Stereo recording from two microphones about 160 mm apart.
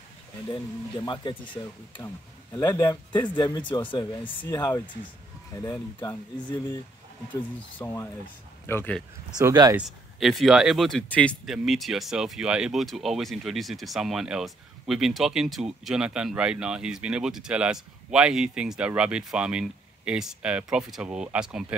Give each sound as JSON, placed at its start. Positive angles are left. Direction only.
{"t": 1.0, "sound": "speech", "side_deg": 30}
{"t": 7.8, "sound": "speech", "side_deg": 20}
{"t": 9.4, "sound": "speech", "side_deg": -20}
{"t": 9.8, "sound": "speech", "side_deg": 0}